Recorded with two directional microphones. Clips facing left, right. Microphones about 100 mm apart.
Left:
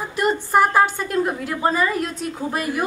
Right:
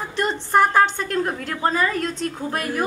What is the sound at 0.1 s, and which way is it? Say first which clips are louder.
A woman's voice: left 1 dB; 10° left (ahead or behind).